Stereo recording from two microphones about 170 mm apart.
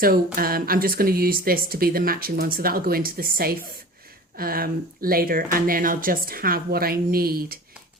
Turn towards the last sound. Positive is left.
turn(degrees=-60)  # may be behind; listen again after turning